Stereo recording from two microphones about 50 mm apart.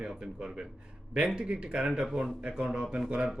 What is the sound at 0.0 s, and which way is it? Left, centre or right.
A man's voice, centre.